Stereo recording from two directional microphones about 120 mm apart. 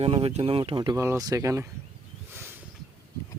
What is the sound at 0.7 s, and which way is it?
Speech, 35° right (ahead or behind).